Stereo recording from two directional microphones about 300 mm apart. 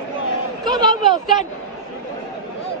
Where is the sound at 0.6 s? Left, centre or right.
Centre.